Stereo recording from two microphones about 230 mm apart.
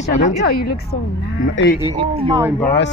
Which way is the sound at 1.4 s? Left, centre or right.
Left.